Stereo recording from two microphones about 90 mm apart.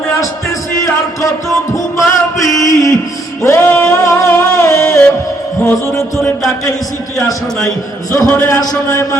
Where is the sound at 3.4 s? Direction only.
30° left (ahead or behind).